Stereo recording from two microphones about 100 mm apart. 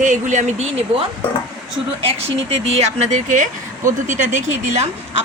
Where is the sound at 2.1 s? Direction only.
90° right.